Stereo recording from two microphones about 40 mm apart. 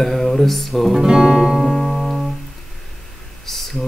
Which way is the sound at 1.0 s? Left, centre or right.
Centre.